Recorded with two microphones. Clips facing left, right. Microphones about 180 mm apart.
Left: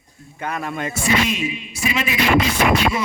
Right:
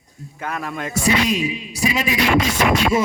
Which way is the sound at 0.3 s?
Centre (ahead or behind).